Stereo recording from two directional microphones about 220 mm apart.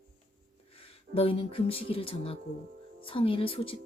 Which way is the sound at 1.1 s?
25° left (ahead or behind).